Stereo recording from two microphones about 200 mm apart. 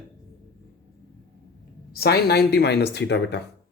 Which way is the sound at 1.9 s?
50° left (ahead or behind).